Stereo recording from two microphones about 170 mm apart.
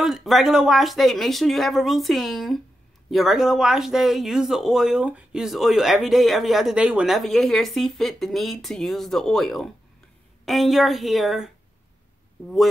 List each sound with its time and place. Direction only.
0.0 s speech: centre (ahead or behind)